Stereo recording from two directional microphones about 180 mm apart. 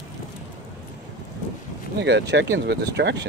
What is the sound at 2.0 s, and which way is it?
Speech, 75° right (ahead or behind).